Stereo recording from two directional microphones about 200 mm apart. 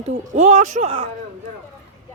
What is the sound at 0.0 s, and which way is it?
Speech, 35° right (ahead or behind).